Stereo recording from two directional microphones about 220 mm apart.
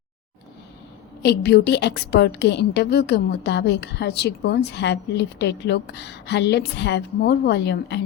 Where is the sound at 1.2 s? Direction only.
50° left (ahead or behind).